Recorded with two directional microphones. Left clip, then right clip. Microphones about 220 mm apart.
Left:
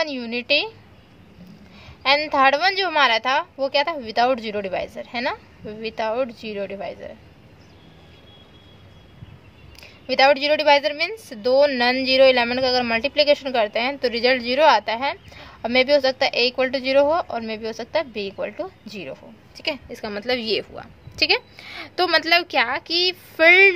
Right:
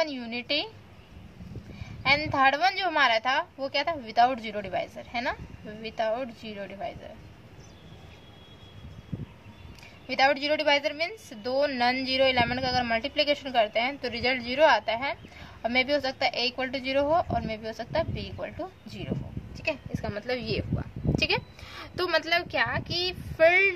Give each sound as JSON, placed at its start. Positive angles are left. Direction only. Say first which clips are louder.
{"t": 0.0, "sound": "a woman's voice", "louder": "left 5 dB", "side_deg": 40}
{"t": 2.0, "sound": "a woman's voice", "louder": "left 6 dB", "side_deg": 40}
{"t": 10.0, "sound": "a woman's voice", "louder": "left 8 dB", "side_deg": 40}